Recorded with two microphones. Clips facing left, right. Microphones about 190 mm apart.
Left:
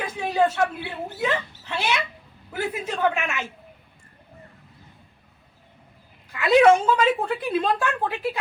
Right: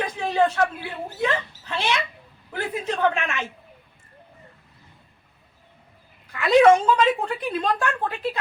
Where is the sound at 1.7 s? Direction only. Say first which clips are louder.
Right 1 dB; 10° left (ahead or behind).